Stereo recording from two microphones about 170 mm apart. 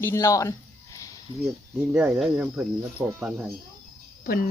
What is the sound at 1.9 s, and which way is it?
Speech, 5° right (ahead or behind).